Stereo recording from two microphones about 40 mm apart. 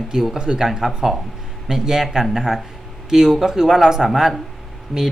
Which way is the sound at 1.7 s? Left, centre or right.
Centre.